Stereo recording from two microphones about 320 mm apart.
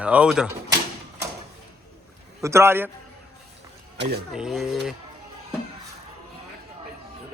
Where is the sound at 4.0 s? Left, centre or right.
Right.